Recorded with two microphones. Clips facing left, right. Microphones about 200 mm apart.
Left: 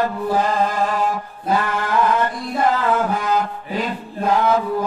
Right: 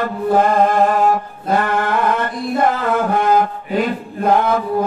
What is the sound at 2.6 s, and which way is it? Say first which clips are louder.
Mantra: even; 55° right (ahead or behind).